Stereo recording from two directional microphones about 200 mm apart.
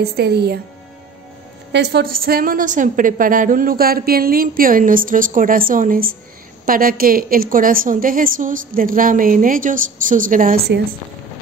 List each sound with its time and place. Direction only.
0.0 s a woman's voice: 55° right (ahead or behind)
1.7 s a woman's voice: 60° right (ahead or behind)